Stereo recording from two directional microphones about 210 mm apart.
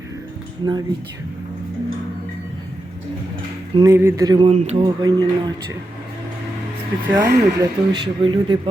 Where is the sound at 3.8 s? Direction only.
10° right (ahead or behind); by 4.9 s 30° right (ahead or behind).